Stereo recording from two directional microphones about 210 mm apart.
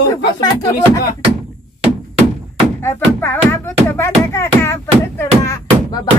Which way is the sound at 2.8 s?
10° left (ahead or behind).